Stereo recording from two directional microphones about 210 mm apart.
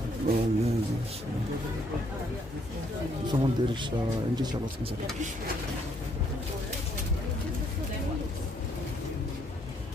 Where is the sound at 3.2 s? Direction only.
20° right (ahead or behind).